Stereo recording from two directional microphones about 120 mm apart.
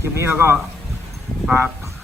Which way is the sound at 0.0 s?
20° right (ahead or behind).